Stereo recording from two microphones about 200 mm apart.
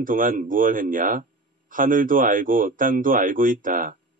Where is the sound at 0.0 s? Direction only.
45° right (ahead or behind).